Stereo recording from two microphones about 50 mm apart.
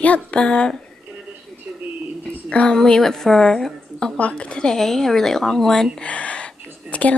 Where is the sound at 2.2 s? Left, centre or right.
Centre.